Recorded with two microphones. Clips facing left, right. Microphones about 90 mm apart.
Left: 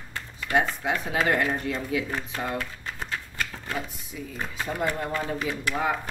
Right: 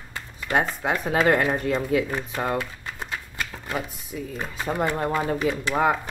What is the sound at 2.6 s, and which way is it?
Typewriter, 15° right (ahead or behind).